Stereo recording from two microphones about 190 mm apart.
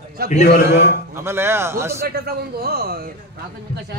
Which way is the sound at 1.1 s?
10° right (ahead or behind).